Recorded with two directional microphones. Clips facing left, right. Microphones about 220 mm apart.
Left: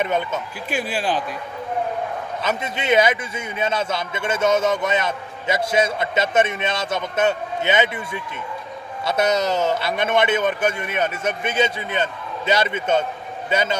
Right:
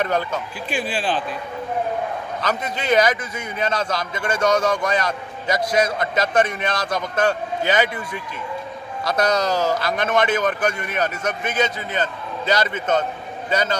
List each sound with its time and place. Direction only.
0.0 s a man's voice: 20° left (ahead or behind)
0.3 s speech: 10° left (ahead or behind)
2.4 s a man's voice: 25° left (ahead or behind)
9.0 s a man's voice: 25° left (ahead or behind)